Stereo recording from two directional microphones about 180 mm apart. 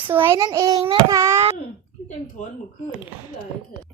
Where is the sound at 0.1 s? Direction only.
15° right (ahead or behind).